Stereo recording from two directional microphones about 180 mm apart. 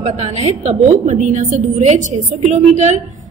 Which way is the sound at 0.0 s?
40° right (ahead or behind).